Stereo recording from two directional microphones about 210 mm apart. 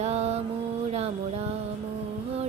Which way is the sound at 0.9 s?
30° right (ahead or behind).